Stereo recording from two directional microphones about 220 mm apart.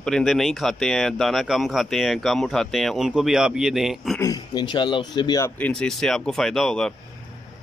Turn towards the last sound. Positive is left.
turn(degrees=0)  # may be behind; listen again after turning